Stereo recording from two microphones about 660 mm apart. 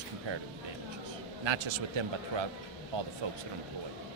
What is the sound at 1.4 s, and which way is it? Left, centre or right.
Speech, right.